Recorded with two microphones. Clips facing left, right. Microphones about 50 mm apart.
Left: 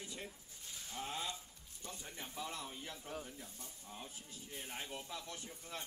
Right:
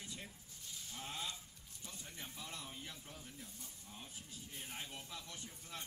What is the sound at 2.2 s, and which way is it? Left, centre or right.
Speech, centre.